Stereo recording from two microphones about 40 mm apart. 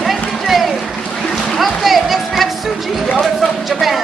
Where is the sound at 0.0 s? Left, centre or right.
Centre.